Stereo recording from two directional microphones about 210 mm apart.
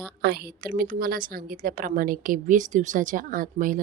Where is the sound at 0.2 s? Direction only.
45° right (ahead or behind).